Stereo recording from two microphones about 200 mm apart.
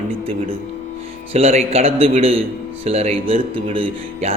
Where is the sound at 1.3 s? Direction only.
30° right (ahead or behind).